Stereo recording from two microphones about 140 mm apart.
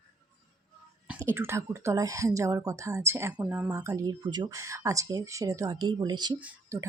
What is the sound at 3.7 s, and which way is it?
Speech, 25° right (ahead or behind).